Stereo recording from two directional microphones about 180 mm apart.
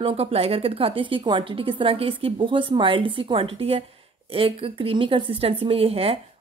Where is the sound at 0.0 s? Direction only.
30° right (ahead or behind).